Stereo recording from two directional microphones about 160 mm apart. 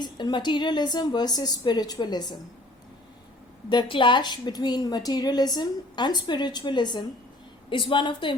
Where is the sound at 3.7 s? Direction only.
30° left (ahead or behind).